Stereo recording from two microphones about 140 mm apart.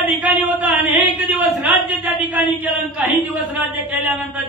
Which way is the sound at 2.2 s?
10° right (ahead or behind).